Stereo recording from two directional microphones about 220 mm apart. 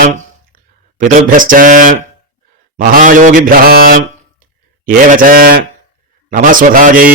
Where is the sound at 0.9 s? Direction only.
35° right (ahead or behind).